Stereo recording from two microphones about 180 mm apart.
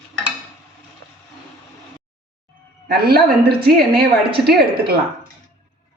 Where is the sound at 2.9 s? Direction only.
60° right (ahead or behind).